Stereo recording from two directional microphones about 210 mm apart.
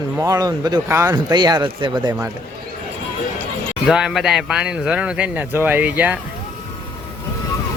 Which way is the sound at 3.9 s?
5° right (ahead or behind).